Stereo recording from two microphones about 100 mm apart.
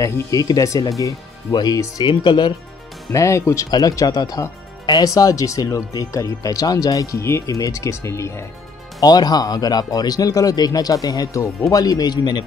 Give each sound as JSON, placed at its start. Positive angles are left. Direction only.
{"t": 0.0, "sound": "speech", "side_deg": 35}
{"t": 3.1, "sound": "speech", "side_deg": 30}
{"t": 9.0, "sound": "speech", "side_deg": 40}